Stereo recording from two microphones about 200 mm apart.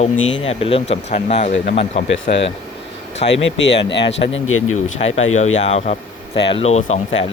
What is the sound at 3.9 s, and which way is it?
Speech, 60° left (ahead or behind).